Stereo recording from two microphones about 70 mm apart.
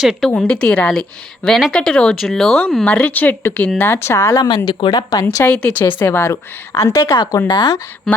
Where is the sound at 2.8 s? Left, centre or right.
Left.